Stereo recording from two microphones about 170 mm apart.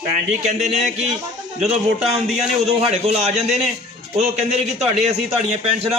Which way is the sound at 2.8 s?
35° right (ahead or behind).